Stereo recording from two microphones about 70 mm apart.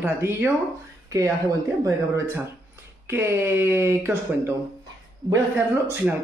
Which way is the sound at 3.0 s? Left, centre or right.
Right.